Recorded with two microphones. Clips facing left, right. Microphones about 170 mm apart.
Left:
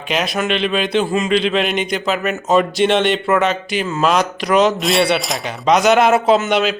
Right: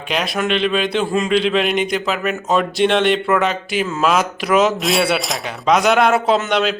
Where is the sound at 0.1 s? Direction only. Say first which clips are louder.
Left 1 dB; centre (ahead or behind).